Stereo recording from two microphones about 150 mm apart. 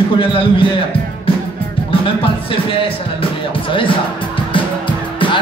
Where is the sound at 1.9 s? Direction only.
35° left (ahead or behind).